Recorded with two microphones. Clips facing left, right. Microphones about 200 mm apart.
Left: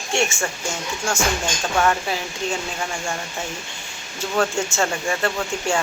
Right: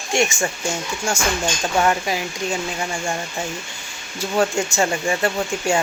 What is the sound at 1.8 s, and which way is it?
Speech, 15° right (ahead or behind).